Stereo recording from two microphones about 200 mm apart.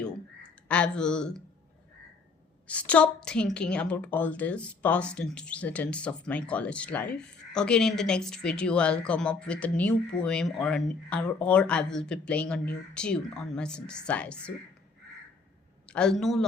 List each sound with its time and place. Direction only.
0.7 s speech: 5° left (ahead or behind)
2.6 s speech: 5° left (ahead or behind)
15.9 s speech: 5° left (ahead or behind)